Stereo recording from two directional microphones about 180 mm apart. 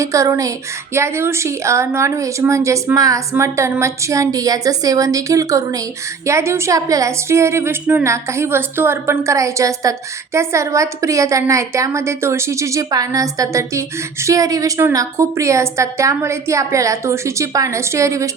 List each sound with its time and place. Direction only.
0.0 s a woman's voice: 15° right (ahead or behind)